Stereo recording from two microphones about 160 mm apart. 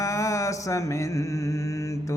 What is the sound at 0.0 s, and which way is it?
Music, 20° left (ahead or behind).